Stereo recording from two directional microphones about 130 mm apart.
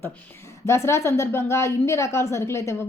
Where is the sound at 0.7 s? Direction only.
20° left (ahead or behind).